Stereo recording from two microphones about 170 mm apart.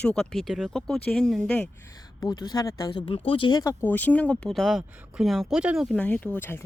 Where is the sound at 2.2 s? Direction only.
25° left (ahead or behind).